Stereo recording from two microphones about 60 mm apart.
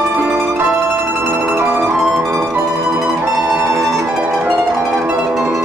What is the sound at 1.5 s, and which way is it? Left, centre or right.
Music, right.